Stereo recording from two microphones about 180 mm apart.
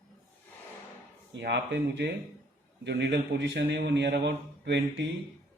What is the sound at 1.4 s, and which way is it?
A man's voice, 70° right (ahead or behind).